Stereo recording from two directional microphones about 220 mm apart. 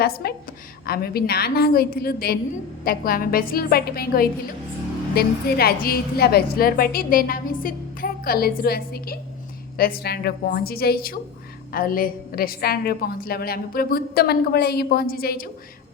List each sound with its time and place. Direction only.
0.0 s a woman's voice: 45° left (ahead or behind)